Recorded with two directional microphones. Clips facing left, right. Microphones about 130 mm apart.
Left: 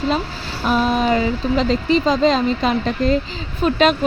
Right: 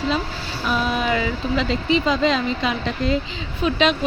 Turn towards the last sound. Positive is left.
turn(degrees=45)  # may be behind; listen again after turning